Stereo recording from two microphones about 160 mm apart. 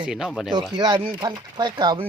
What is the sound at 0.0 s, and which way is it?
Speech, 5° right (ahead or behind).